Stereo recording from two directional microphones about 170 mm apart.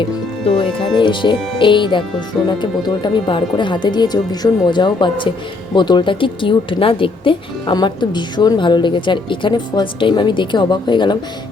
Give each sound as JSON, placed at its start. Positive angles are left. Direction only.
{"t": 0.4, "sound": "speech", "side_deg": 35}